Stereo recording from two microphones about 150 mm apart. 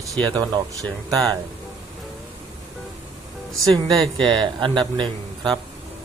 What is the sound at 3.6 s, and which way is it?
Speech, centre (ahead or behind).